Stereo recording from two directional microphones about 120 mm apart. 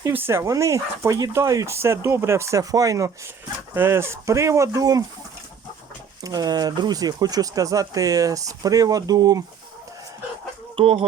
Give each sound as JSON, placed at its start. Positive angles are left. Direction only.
{"t": 0.0, "sound": "speech", "side_deg": -20}
{"t": 6.2, "sound": "speech", "side_deg": -30}
{"t": 10.8, "sound": "speech", "side_deg": -50}